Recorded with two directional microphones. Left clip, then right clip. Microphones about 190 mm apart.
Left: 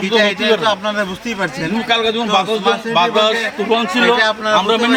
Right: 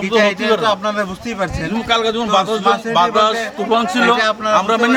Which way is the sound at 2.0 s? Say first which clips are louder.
Even; 20° right (ahead or behind).